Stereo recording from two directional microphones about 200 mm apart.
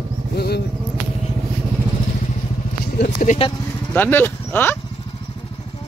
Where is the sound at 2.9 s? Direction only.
40° left (ahead or behind).